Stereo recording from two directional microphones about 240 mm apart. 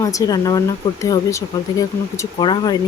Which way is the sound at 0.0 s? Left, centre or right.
Centre.